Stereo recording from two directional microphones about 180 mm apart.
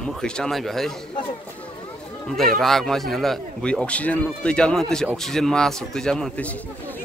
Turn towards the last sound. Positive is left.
turn(degrees=5)  # may be behind; listen again after turning